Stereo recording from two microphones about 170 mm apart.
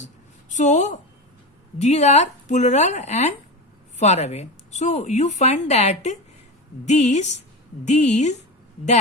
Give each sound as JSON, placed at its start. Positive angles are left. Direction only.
{"t": 0.5, "sound": "a woman's voice", "side_deg": 45}